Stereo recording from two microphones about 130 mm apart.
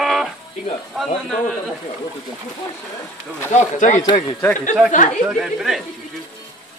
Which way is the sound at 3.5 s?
70° left (ahead or behind).